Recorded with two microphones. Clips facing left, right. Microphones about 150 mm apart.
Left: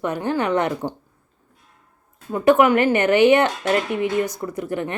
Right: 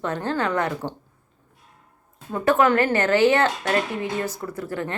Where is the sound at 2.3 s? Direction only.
15° left (ahead or behind).